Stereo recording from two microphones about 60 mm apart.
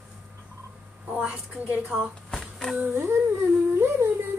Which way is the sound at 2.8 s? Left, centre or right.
Right.